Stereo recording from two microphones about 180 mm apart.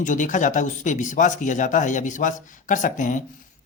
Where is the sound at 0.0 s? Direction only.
45° left (ahead or behind).